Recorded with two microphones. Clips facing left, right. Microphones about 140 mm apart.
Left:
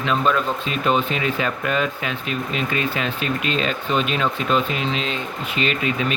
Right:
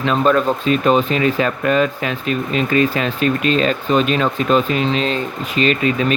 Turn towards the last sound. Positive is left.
turn(degrees=-40)  # may be behind; listen again after turning